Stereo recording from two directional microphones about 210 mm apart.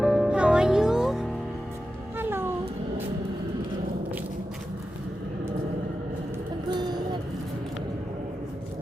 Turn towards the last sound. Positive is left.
turn(degrees=-20)  # may be behind; listen again after turning